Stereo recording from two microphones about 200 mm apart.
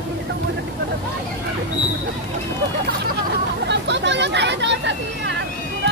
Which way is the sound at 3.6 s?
60° right (ahead or behind).